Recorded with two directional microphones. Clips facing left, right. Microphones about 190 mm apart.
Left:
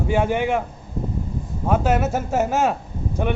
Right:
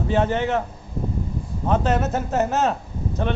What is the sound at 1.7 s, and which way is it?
A man's voice, 10° left (ahead or behind).